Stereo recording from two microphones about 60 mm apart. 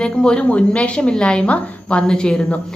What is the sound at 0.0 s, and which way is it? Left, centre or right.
A woman's voice, centre.